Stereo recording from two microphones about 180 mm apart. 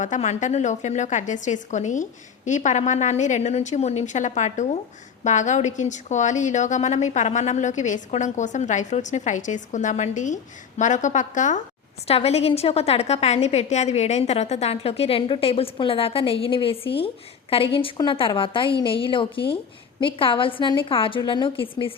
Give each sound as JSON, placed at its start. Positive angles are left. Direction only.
{"t": 0.0, "sound": "a woman's voice", "side_deg": 40}